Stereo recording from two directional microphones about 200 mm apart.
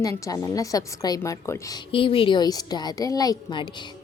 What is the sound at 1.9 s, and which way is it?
A woman's voice, 25° left (ahead or behind).